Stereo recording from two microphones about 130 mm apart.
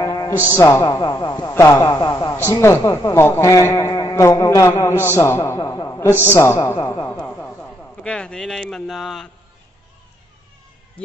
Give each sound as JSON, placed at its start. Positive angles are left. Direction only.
{"t": 0.0, "sound": "music", "side_deg": 30}
{"t": 0.5, "sound": "a man's voice", "side_deg": 25}
{"t": 1.5, "sound": "a man's voice", "side_deg": 20}
{"t": 7.2, "sound": "a man's voice", "side_deg": 10}